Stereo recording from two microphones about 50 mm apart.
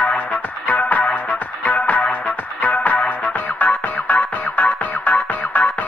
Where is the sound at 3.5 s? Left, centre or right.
Left.